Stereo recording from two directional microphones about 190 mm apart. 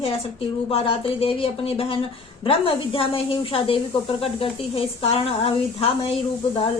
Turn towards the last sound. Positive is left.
turn(degrees=30)  # may be behind; listen again after turning